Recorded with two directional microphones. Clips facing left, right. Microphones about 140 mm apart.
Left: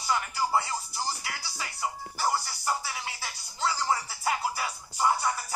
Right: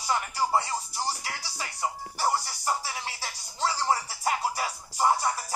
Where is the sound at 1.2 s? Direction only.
30° right (ahead or behind).